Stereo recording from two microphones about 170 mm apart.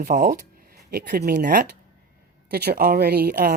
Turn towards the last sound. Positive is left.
turn(degrees=-65)  # may be behind; listen again after turning